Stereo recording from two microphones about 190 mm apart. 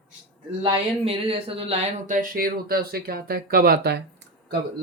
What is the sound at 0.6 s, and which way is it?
Speech, 30° right (ahead or behind).